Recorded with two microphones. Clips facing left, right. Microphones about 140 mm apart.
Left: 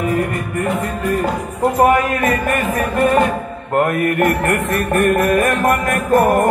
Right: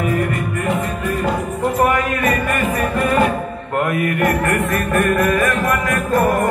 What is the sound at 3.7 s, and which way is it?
Mantra, 50° left (ahead or behind).